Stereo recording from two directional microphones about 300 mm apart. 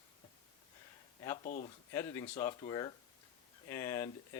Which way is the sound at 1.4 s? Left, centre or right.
Left.